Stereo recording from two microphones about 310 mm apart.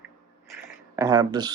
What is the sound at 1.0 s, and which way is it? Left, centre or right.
Speech, centre.